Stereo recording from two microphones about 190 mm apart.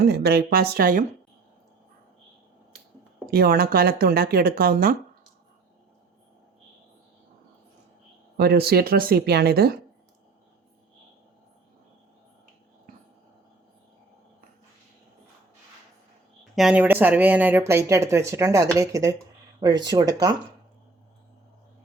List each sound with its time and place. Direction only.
0.0 s speech: 60° right (ahead or behind)
3.2 s speech: 55° right (ahead or behind)
8.4 s speech: 55° right (ahead or behind)
16.4 s speech: centre (ahead or behind); by 20.3 s 20° right (ahead or behind)